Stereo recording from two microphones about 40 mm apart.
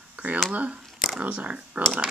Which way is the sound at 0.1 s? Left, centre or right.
Right.